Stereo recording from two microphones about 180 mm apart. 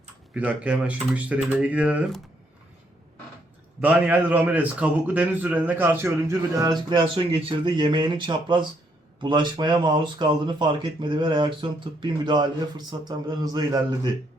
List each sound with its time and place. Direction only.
0.3 s a man's voice: 5° right (ahead or behind)
3.8 s a man's voice: 10° right (ahead or behind)